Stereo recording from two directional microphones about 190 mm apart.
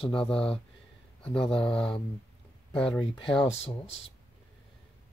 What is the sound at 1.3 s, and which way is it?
Speech, 25° left (ahead or behind).